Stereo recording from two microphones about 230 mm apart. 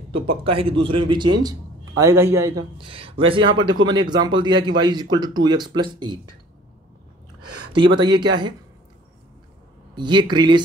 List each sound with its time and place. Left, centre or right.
0.4 s a man's voice: right
7.7 s a man's voice: right
9.9 s a man's voice: centre